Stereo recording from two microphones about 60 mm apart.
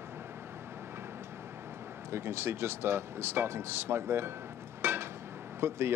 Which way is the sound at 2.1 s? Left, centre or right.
Right.